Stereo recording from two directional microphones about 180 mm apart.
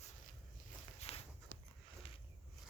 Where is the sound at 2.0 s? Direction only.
30° left (ahead or behind).